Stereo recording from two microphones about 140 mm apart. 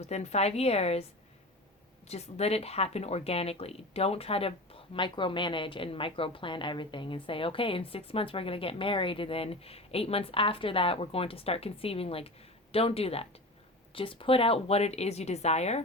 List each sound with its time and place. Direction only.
0.0 s a woman's voice: 50° left (ahead or behind)
2.0 s a woman's voice: 50° left (ahead or behind)